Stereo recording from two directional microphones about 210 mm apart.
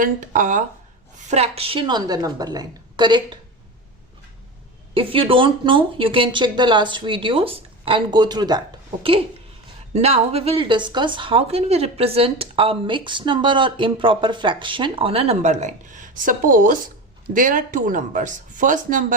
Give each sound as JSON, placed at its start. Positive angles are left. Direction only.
{"t": 0.0, "sound": "a woman's voice", "side_deg": -40}
{"t": 4.9, "sound": "a woman's voice", "side_deg": -25}
{"t": 9.9, "sound": "a woman's voice", "side_deg": -30}